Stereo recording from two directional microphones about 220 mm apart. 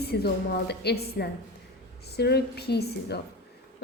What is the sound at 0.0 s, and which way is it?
A woman's voice, 45° left (ahead or behind).